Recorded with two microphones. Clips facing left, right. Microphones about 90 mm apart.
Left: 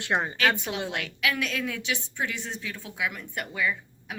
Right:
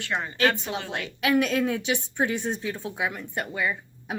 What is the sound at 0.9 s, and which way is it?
A woman's voice, 35° right (ahead or behind).